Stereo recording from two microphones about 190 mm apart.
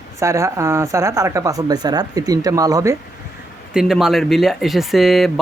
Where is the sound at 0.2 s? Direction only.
15° right (ahead or behind).